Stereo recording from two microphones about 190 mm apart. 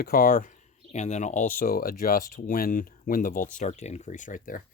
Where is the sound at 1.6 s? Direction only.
50° left (ahead or behind).